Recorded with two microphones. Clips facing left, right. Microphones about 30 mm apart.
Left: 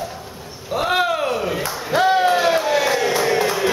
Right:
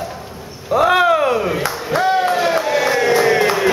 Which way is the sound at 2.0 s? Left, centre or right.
Centre.